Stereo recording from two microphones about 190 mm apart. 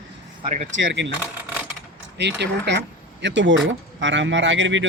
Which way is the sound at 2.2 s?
65° right (ahead or behind).